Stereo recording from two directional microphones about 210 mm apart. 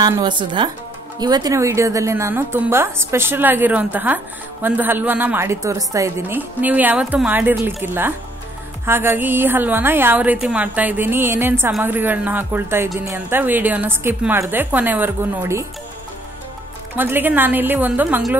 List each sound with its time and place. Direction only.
0.0 s speech: 20° right (ahead or behind)
16.9 s speech: 10° right (ahead or behind)